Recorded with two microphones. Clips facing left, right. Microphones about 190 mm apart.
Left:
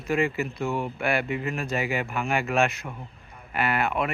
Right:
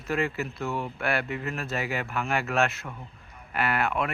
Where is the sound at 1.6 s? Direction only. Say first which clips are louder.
Left 3 dB; centre (ahead or behind).